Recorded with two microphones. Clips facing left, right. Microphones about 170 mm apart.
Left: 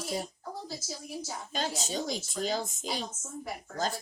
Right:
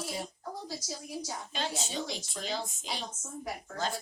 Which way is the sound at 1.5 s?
40° left (ahead or behind).